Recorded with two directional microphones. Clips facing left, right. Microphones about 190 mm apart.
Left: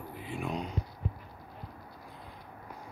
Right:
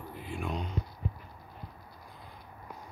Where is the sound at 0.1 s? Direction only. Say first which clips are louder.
Left 1 dB; centre (ahead or behind).